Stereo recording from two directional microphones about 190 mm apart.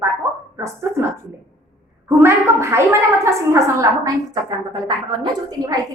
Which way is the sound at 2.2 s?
15° right (ahead or behind).